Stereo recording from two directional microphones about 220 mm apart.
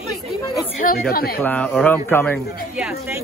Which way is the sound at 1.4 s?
5° left (ahead or behind).